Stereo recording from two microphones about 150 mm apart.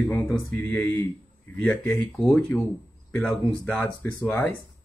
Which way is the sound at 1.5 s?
10° left (ahead or behind).